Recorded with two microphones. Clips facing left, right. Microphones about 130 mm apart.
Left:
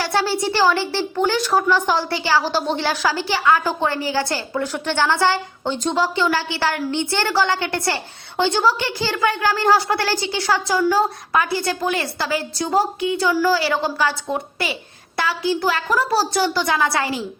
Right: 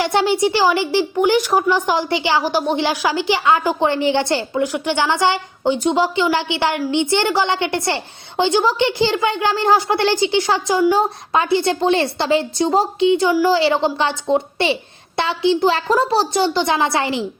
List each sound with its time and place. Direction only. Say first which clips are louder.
0.0 s speech: right 4 dB; 20° right (ahead or behind)